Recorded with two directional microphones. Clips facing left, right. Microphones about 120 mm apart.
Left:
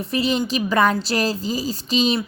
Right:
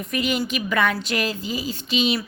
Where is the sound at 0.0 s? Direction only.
30° left (ahead or behind).